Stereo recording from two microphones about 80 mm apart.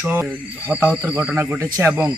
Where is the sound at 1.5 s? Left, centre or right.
Right.